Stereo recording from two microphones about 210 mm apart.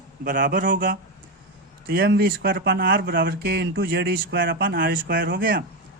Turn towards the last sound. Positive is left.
turn(degrees=-40)  # may be behind; listen again after turning